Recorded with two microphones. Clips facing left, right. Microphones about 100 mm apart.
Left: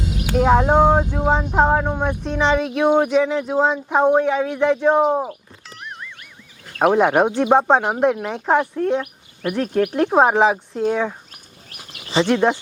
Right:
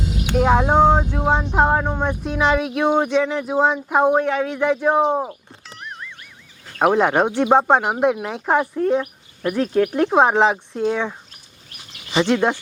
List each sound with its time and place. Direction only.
0.3 s speech: centre (ahead or behind)
1.8 s speech: 10° left (ahead or behind)
2.2 s speech: 5° right (ahead or behind)
4.2 s speech: 10° left (ahead or behind)
4.6 s speech: 5° right (ahead or behind)
5.6 s music: centre (ahead or behind)
6.7 s speech: centre (ahead or behind)
11.8 s bird: 55° left (ahead or behind)
12.2 s speech: 10° left (ahead or behind)